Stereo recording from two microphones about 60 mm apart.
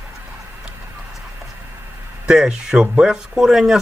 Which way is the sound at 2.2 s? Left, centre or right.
Centre.